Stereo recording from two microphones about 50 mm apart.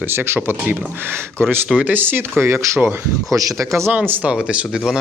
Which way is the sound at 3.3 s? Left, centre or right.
Right.